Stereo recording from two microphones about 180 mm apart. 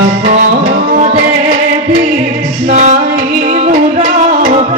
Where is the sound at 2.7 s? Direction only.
40° right (ahead or behind).